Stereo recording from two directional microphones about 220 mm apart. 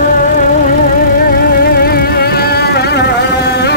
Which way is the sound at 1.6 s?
45° left (ahead or behind).